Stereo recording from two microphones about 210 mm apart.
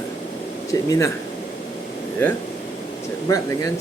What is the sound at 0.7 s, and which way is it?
Speech, 15° left (ahead or behind).